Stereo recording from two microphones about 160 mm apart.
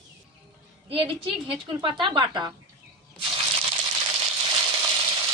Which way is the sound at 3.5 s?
30° right (ahead or behind).